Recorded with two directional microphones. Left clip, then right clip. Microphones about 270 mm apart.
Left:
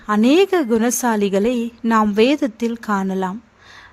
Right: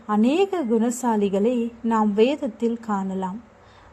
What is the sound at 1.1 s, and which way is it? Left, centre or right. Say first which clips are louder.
Speech: left 3 dB; left.